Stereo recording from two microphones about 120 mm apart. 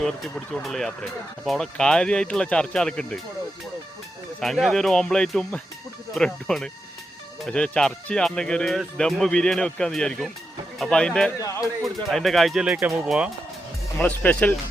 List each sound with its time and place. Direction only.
0.0 s speech: 5° left (ahead or behind)
4.4 s speech: centre (ahead or behind)
11.3 s speech: 30° left (ahead or behind)
12.0 s speech: centre (ahead or behind)
14.0 s speech: 10° left (ahead or behind)